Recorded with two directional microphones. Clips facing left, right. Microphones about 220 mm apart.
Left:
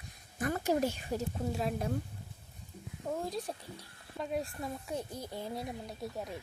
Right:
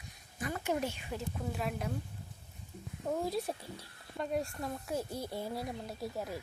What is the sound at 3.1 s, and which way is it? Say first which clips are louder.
Speech: right 2 dB; centre (ahead or behind).